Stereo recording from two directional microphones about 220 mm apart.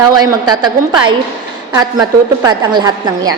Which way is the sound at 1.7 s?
15° right (ahead or behind).